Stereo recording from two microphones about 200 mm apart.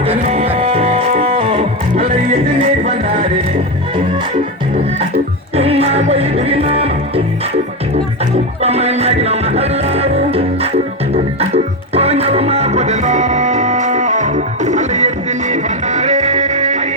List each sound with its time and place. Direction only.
0.3 s music: 30° right (ahead or behind)
5.5 s music: 30° right (ahead or behind)
8.6 s music: 30° right (ahead or behind)